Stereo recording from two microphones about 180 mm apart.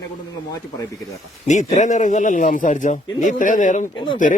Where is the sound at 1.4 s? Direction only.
40° left (ahead or behind).